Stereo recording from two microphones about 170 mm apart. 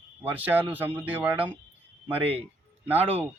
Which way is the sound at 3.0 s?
35° right (ahead or behind).